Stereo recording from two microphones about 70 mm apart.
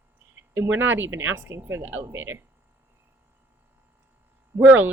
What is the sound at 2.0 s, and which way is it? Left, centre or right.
Speech, right.